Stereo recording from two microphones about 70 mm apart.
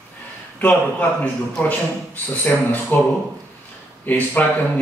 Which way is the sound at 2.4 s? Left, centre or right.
Left.